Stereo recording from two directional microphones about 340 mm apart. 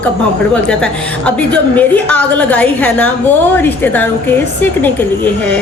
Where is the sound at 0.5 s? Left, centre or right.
Centre.